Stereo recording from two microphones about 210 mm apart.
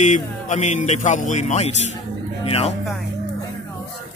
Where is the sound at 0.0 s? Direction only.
35° left (ahead or behind).